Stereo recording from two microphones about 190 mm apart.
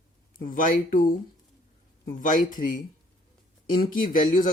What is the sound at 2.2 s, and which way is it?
Speech, 45° left (ahead or behind).